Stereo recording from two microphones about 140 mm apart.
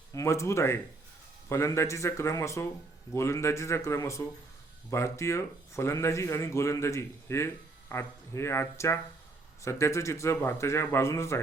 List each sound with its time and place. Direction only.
0.1 s speech: 20° left (ahead or behind)
9.6 s speech: 20° left (ahead or behind)